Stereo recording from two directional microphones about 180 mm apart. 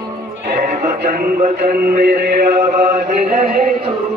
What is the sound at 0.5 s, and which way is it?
Music, 60° right (ahead or behind).